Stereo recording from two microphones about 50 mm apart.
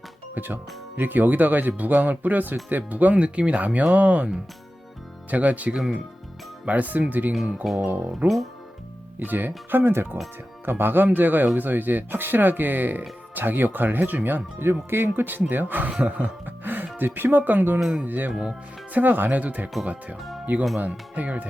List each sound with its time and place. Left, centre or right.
0.3 s speech: right
5.3 s speech: right
7.6 s speech: centre
7.9 s speech: right
14.7 s speech: right
15.9 s speech: right
16.5 s music: right
17.2 s speech: right